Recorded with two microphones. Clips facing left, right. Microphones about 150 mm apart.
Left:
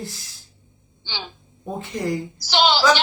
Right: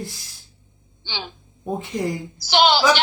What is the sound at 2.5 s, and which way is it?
Speech, 55° right (ahead or behind).